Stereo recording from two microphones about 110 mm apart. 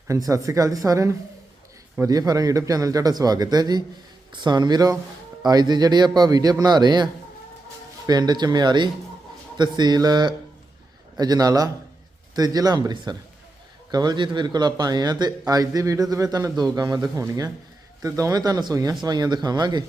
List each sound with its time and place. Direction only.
0.1 s a man's voice: 30° right (ahead or behind)